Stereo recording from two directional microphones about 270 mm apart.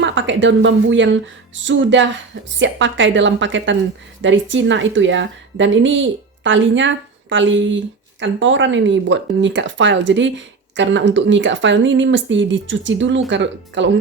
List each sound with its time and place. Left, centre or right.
0.0 s speech: right